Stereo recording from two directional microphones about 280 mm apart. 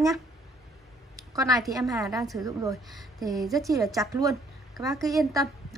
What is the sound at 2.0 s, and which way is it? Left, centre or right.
Speech, centre.